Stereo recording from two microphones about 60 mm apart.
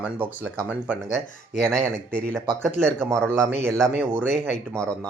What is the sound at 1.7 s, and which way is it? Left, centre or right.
Speech, centre.